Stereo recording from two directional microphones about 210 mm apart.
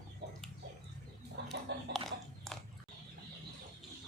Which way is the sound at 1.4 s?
50° right (ahead or behind).